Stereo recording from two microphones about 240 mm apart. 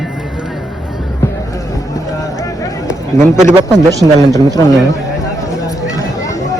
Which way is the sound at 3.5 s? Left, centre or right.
Centre.